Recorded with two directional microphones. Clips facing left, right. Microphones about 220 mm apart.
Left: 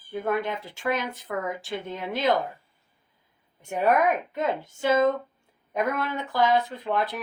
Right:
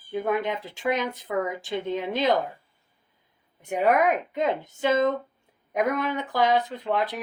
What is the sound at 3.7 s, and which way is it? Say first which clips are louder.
Speech: right 1 dB; 15° right (ahead or behind).